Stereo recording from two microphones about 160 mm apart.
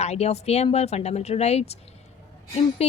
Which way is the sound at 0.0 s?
40° left (ahead or behind).